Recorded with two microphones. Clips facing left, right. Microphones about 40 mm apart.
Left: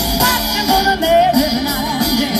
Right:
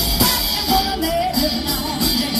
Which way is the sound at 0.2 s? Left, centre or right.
Centre.